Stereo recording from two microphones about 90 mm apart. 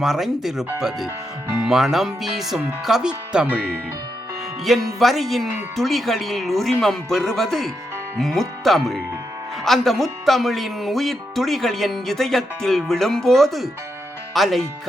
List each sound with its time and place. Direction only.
0.0 s speech: 5° right (ahead or behind)
4.6 s speech: centre (ahead or behind)